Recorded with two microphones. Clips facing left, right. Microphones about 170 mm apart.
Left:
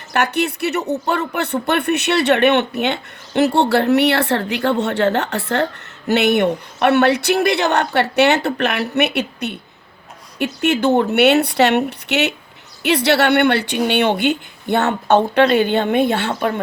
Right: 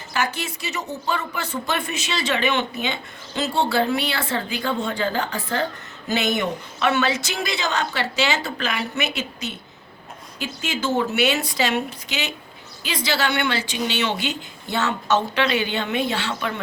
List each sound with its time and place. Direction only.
0.1 s a woman's voice: 65° left (ahead or behind); by 16.6 s 50° left (ahead or behind)